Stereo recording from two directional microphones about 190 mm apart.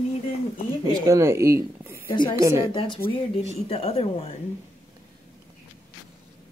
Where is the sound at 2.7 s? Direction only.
25° left (ahead or behind).